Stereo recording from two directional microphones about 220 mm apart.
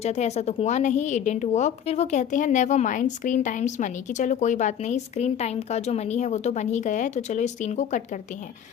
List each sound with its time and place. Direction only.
0.0 s a woman's voice: 30° left (ahead or behind)